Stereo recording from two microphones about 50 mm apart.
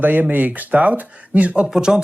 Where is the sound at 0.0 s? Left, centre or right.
Right.